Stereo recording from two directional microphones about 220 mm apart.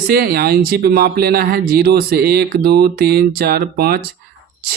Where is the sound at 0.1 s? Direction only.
45° right (ahead or behind).